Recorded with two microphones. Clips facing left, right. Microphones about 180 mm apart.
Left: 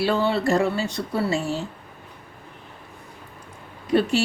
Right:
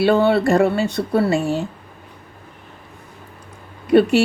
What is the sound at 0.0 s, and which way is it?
A woman's voice, 60° right (ahead or behind).